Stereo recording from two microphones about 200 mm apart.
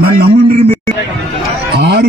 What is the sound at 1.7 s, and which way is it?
Speech, 55° right (ahead or behind).